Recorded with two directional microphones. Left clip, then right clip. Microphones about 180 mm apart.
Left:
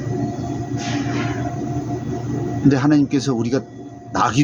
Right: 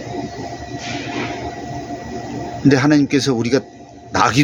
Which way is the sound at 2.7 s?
15° right (ahead or behind).